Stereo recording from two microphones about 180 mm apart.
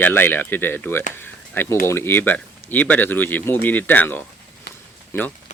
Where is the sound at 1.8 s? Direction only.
15° left (ahead or behind).